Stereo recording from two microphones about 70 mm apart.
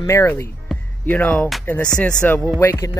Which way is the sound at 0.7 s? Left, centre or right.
Centre.